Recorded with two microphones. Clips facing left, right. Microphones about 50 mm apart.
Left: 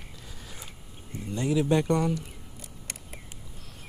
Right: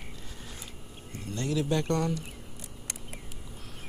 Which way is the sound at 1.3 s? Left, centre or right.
Centre.